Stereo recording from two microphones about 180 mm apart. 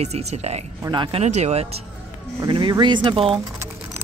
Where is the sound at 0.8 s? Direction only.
25° right (ahead or behind).